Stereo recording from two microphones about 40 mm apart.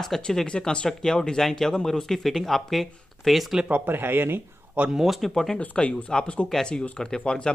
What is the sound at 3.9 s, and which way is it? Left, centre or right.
Speech, right.